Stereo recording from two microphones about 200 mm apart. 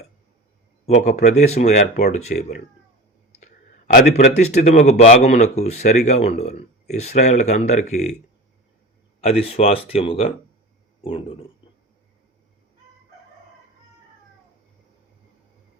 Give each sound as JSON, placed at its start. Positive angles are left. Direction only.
{"t": 0.9, "sound": "speech", "side_deg": 35}
{"t": 9.2, "sound": "speech", "side_deg": 30}